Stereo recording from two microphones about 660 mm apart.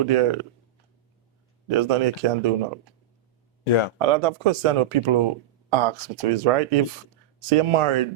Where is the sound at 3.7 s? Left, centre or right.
Left.